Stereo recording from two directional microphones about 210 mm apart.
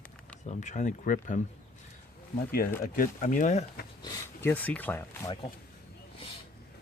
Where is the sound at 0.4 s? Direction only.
35° left (ahead or behind).